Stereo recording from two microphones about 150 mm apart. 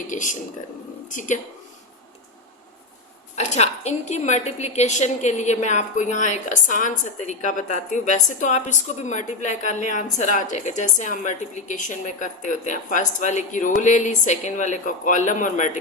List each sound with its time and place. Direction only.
0.1 s a woman's voice: 55° left (ahead or behind)
3.3 s a woman's voice: 50° left (ahead or behind)